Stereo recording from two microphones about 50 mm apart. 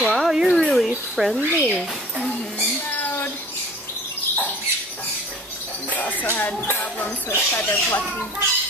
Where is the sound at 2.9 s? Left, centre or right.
Left.